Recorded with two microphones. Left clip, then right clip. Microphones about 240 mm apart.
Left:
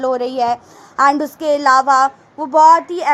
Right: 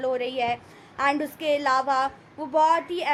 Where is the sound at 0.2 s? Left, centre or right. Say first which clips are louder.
Left 9 dB; left.